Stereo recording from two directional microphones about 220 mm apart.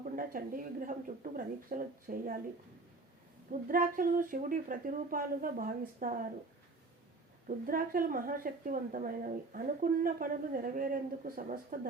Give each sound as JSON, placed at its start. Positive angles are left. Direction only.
{"t": 0.0, "sound": "a woman's voice", "side_deg": -40}
{"t": 3.5, "sound": "a woman's voice", "side_deg": -40}
{"t": 7.4, "sound": "a woman's voice", "side_deg": -40}